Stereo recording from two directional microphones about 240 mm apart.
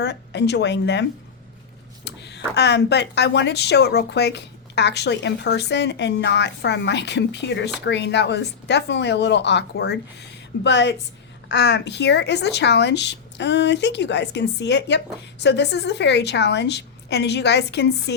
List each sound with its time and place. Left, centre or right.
0.0 s speech: left
2.0 s speech: left